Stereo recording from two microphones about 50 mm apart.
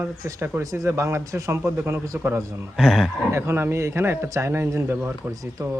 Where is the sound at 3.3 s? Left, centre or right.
Right.